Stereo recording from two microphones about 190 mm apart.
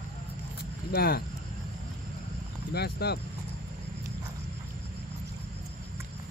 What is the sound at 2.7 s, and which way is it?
Speech, 60° left (ahead or behind).